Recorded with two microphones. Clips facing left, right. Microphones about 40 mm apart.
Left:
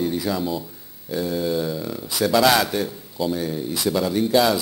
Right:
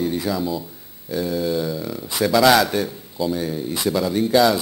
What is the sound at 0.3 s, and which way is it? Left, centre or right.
Mantra, centre.